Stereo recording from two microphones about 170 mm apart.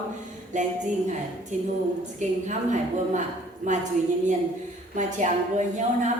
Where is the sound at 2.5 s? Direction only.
45° right (ahead or behind).